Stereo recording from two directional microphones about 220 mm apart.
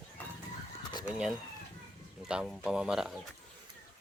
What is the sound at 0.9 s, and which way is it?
Speech, 20° left (ahead or behind).